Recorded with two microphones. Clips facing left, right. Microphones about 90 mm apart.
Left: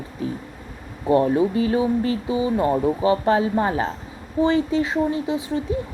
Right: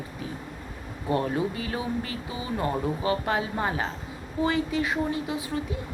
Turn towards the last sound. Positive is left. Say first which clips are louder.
# left 6 dB
turn(degrees=25)  # may be behind; listen again after turning